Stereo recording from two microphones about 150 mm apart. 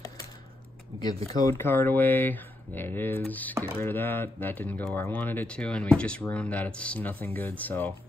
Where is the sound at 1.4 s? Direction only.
20° left (ahead or behind).